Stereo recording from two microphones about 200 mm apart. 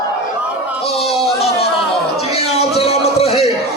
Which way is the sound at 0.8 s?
30° left (ahead or behind).